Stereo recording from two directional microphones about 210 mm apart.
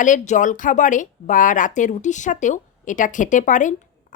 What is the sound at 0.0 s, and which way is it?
A woman's voice, 35° left (ahead or behind).